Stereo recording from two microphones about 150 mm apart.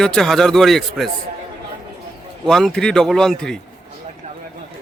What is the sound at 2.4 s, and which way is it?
A man's voice, 5° left (ahead or behind).